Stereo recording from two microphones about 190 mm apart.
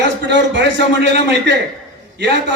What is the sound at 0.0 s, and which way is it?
A man's voice, 70° right (ahead or behind).